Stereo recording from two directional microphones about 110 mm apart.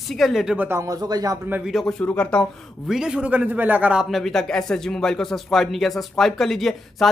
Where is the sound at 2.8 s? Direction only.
5° right (ahead or behind).